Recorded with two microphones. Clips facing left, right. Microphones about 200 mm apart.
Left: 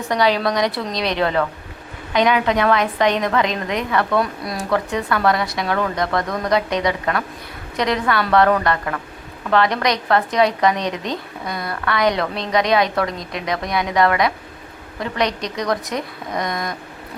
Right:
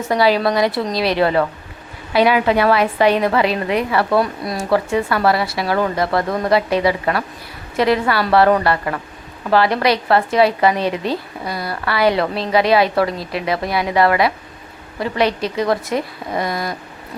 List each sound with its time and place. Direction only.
0.1 s a woman's voice: 5° right (ahead or behind)
6.2 s speech: 25° right (ahead or behind)
6.5 s a woman's voice: 5° right (ahead or behind)